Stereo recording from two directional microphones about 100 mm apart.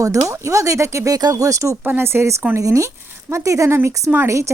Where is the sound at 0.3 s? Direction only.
30° right (ahead or behind).